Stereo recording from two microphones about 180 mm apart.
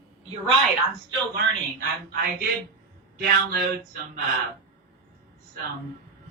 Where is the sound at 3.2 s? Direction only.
55° right (ahead or behind).